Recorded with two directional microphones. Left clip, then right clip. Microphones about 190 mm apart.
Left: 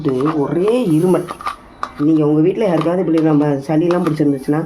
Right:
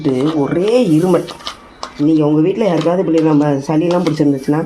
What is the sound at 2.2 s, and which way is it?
Speech, 25° right (ahead or behind).